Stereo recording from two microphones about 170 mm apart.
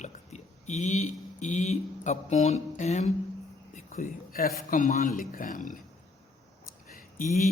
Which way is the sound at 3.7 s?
55° left (ahead or behind).